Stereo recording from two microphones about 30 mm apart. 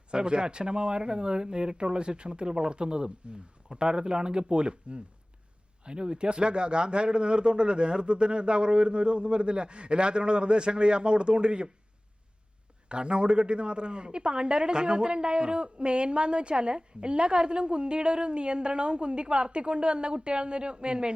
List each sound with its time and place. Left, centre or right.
0.1 s speech: right
12.9 s speech: right